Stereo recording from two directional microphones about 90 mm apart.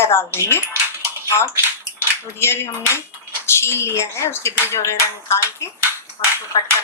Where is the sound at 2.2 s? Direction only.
25° left (ahead or behind).